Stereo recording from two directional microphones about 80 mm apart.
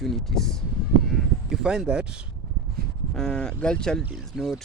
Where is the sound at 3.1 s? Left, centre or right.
Centre.